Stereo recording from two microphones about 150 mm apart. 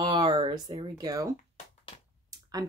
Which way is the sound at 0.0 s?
30° right (ahead or behind).